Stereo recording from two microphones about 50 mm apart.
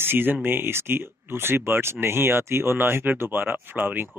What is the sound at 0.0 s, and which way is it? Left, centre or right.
Speech, right.